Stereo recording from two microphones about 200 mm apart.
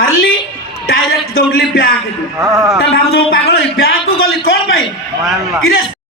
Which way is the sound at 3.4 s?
50° left (ahead or behind).